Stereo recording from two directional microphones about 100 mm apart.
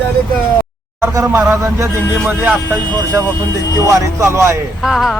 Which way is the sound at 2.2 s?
15° right (ahead or behind).